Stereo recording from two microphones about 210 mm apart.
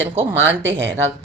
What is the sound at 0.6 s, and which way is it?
Speech, 60° right (ahead or behind).